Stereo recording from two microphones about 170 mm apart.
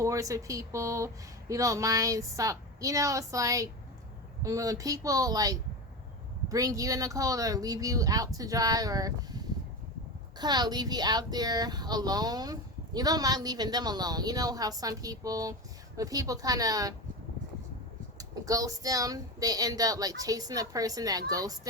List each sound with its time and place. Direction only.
0.0 s speech: 20° right (ahead or behind)
18.2 s speech: 20° right (ahead or behind)